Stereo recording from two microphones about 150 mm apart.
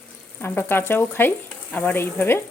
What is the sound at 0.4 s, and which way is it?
Speech, 15° left (ahead or behind).